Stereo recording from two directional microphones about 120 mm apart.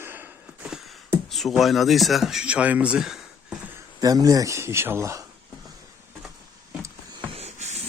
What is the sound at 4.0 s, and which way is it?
Speech, 30° right (ahead or behind).